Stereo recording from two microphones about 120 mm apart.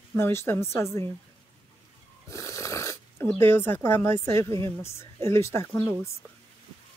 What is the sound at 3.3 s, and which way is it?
A woman's voice, 20° left (ahead or behind).